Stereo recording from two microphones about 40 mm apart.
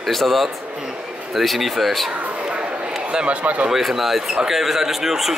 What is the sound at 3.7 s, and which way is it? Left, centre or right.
Speech, centre.